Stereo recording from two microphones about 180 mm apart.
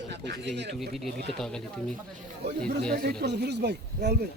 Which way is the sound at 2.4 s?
70° right (ahead or behind).